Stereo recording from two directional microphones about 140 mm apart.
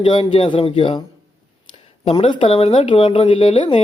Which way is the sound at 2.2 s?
40° left (ahead or behind).